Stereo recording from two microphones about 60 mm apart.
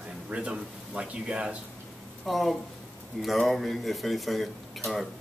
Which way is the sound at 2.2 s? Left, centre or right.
Centre.